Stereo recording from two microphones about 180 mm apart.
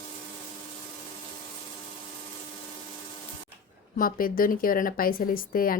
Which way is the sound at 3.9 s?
50° left (ahead or behind).